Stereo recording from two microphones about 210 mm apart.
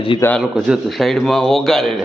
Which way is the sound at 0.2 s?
10° left (ahead or behind).